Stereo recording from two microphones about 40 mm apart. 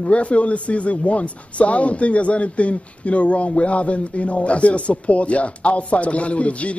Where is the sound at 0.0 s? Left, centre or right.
Left.